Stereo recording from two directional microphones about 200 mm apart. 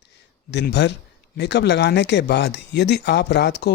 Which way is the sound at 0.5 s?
60° left (ahead or behind).